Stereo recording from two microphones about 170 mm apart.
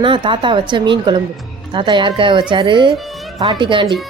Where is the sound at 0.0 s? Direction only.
30° right (ahead or behind).